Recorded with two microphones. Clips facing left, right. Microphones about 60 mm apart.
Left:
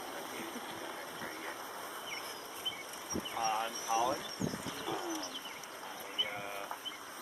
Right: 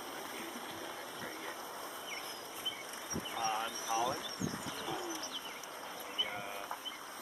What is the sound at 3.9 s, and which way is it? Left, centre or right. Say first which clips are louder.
Vehicle: left 2 dB; left.